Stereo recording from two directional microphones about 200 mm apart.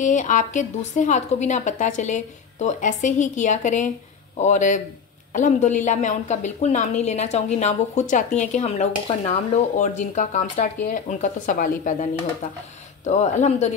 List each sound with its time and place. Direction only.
0.0 s a woman's voice: 40° left (ahead or behind)